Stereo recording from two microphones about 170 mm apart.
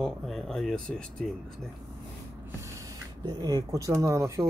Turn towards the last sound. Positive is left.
turn(degrees=-15)  # may be behind; listen again after turning